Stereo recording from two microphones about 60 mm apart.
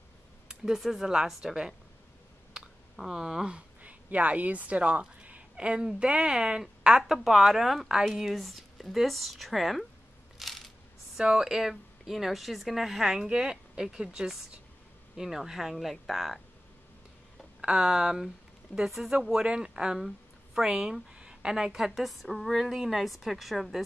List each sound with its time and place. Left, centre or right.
0.5 s a woman's voice: centre
10.3 s crushing: centre
11.1 s a woman's voice: centre
17.6 s a woman's voice: centre